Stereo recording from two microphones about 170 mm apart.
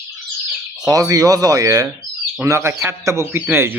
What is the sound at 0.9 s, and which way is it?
A man's voice, 20° right (ahead or behind).